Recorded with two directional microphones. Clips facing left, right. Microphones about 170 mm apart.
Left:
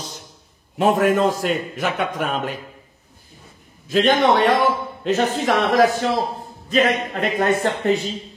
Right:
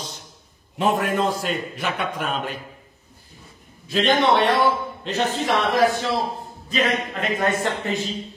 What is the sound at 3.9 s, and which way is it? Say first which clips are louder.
A man's voice: left 2 dB; 40° left (ahead or behind).